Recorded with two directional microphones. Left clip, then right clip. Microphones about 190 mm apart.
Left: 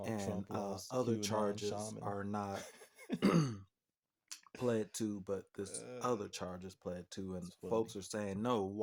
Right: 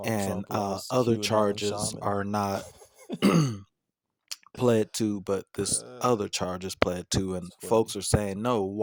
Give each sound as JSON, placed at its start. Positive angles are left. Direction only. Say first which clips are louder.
{"t": 0.0, "sound": "speech", "louder": "right 11 dB", "side_deg": -50}
{"t": 3.2, "sound": "throat clearing", "louder": "right 10 dB", "side_deg": -40}
{"t": 4.3, "sound": "speech", "louder": "right 13 dB", "side_deg": -50}